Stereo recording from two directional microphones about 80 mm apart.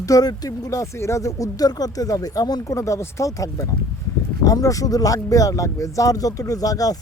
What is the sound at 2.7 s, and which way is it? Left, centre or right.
Speech, left.